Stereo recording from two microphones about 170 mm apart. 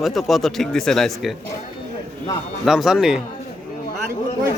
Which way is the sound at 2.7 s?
5° right (ahead or behind).